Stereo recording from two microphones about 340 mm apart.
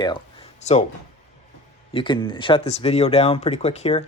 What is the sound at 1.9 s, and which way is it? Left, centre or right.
Speech, centre.